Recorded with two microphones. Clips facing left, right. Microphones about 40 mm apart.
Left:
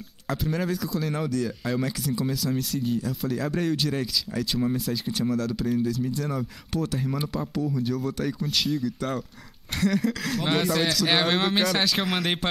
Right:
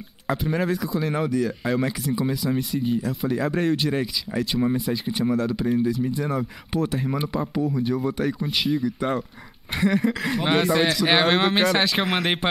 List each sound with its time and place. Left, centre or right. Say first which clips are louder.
0.3 s speech: right 4 dB; centre